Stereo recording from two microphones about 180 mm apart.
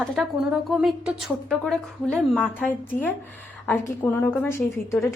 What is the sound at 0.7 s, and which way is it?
A woman's voice, 5° right (ahead or behind).